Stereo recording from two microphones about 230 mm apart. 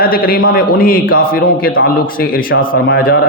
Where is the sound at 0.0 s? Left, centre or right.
Left.